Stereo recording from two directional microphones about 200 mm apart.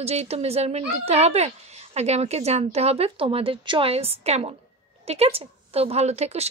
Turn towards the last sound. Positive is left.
turn(degrees=-30)  # may be behind; listen again after turning